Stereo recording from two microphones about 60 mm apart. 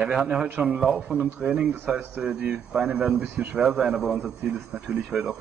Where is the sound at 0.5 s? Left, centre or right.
Right.